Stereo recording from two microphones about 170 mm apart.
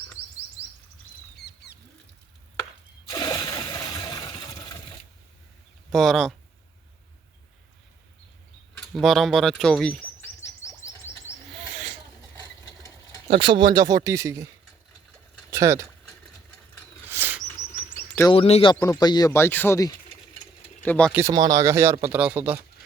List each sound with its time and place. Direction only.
1.4 s rodents: 75° left (ahead or behind)
3.1 s a sound: 25° left (ahead or behind)
5.9 s speech: centre (ahead or behind)
8.8 s mechanisms: centre (ahead or behind)
10.6 s bird: 15° left (ahead or behind)
13.2 s speech: 30° right (ahead or behind)
15.4 s a sound: 20° right (ahead or behind)
17.1 s bird: 10° right (ahead or behind)
18.3 s a man's voice: 35° left (ahead or behind)
18.7 s speech: 20° left (ahead or behind)
21.1 s speech: 15° right (ahead or behind)